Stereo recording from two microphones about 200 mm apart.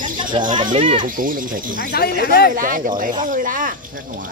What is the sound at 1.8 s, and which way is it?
Speech, 50° left (ahead or behind).